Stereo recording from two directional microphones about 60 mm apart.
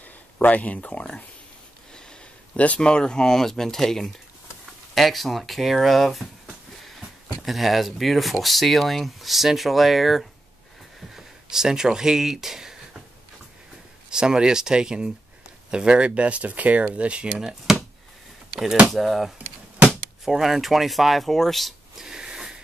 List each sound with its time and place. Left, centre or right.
0.0 s speech: left; by 12.7 s centre
14.1 s speech: centre
17.4 s speech: centre
18.9 s speech: centre